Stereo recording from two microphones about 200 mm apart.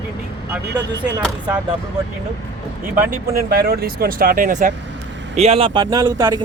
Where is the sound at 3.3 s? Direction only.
50° right (ahead or behind).